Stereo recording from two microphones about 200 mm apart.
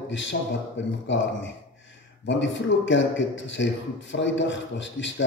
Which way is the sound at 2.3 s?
65° left (ahead or behind).